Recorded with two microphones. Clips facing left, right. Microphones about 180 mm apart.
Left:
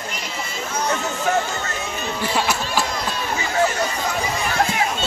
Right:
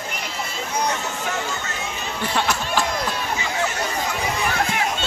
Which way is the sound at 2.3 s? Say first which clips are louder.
Even; 5° left (ahead or behind).